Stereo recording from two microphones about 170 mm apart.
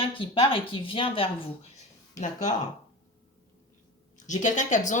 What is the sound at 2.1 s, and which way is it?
Speech, 45° left (ahead or behind).